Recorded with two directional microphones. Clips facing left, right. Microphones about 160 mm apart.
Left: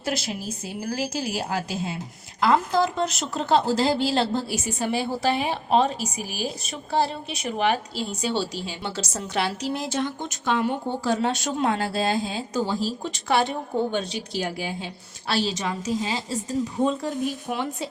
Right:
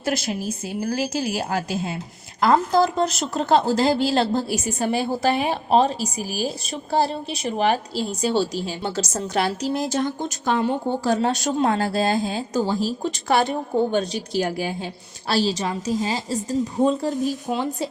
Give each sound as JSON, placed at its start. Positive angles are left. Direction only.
{"t": 0.0, "sound": "speech", "side_deg": -50}
{"t": 2.4, "sound": "speech", "side_deg": -40}